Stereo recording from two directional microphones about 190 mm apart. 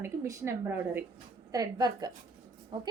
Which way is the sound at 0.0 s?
15° right (ahead or behind).